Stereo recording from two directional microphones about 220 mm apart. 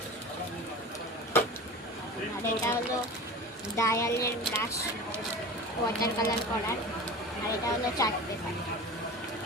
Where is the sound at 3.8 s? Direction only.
15° left (ahead or behind).